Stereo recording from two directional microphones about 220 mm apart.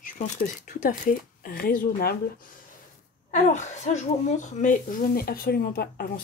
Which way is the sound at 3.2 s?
35° left (ahead or behind).